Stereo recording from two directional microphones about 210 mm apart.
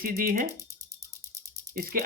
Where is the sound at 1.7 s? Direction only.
45° right (ahead or behind).